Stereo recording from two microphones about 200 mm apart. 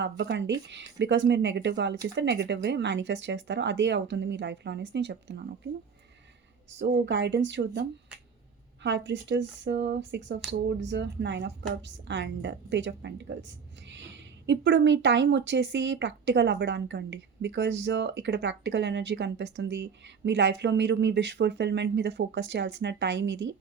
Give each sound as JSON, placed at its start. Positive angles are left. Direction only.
{"t": 0.0, "sound": "a woman's voice", "side_deg": -60}
{"t": 6.7, "sound": "a woman's voice", "side_deg": -60}